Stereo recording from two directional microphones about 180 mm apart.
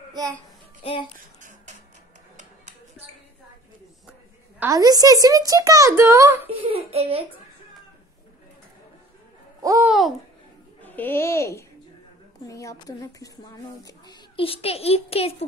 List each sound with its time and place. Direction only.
0.8 s a child's voice: 30° left (ahead or behind)
4.6 s a woman's voice: 15° right (ahead or behind)
6.5 s speech: 30° right (ahead or behind)
9.6 s babbling: 20° right (ahead or behind)
9.8 s babbling: centre (ahead or behind)
10.8 s a child's voice: 10° left (ahead or behind); by 15.3 s 35° left (ahead or behind)